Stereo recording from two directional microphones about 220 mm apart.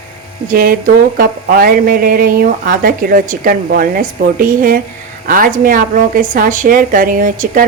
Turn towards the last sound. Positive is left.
turn(degrees=-35)  # may be behind; listen again after turning